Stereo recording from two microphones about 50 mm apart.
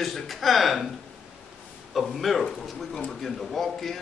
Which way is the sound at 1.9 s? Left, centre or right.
Centre.